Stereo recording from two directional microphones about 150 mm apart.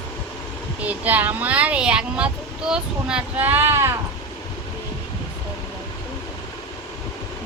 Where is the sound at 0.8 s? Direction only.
10° right (ahead or behind).